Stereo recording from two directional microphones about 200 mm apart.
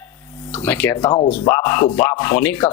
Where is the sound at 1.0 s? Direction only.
30° left (ahead or behind).